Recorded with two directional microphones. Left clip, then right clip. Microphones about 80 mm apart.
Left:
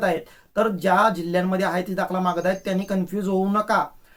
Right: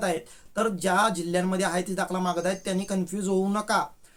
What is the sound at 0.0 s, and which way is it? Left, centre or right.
Speech, right.